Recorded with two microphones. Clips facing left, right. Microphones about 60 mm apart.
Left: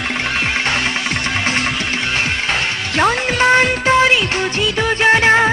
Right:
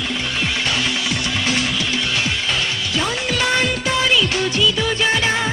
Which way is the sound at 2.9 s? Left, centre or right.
Left.